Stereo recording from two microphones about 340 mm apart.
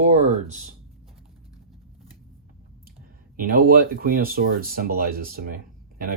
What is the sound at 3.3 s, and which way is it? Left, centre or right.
Speech, right.